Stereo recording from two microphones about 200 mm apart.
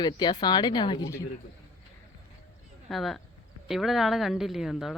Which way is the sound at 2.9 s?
Centre (ahead or behind).